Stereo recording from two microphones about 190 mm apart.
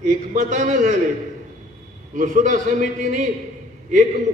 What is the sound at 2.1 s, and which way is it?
A man's voice, 40° right (ahead or behind).